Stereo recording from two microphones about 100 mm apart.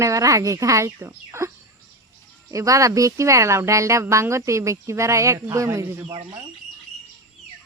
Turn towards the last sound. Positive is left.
turn(degrees=-30)  # may be behind; listen again after turning